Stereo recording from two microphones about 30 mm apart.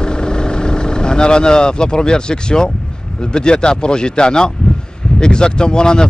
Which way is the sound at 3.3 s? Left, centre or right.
Left.